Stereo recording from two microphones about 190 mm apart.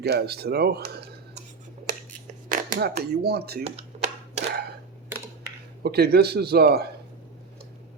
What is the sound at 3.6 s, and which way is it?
Typewriter, 35° right (ahead or behind).